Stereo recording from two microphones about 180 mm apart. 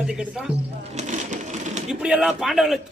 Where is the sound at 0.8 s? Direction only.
40° right (ahead or behind).